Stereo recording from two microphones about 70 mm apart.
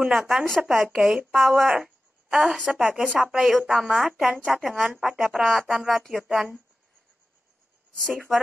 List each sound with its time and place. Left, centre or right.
0.1 s a woman's voice: centre
6.2 s a woman's voice: centre